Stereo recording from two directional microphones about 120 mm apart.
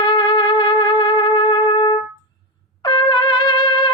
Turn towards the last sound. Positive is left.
turn(degrees=40)  # may be behind; listen again after turning